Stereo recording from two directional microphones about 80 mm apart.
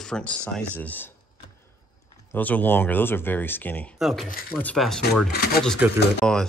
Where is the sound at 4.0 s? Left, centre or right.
Centre.